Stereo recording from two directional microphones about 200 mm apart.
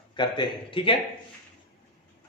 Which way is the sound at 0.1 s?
20° left (ahead or behind).